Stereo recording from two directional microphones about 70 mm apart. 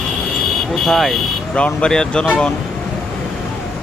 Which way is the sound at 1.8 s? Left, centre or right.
Centre.